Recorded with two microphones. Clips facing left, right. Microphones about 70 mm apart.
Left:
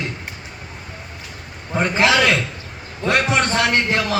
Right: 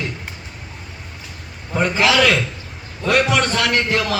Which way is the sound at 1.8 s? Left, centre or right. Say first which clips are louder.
Even; left.